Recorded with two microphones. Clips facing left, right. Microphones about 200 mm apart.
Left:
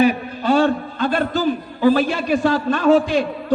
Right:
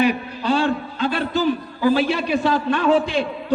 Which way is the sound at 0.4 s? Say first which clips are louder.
Left 4 dB; 50° left (ahead or behind).